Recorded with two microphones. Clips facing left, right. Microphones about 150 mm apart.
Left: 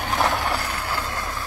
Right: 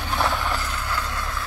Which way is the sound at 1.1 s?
45° left (ahead or behind).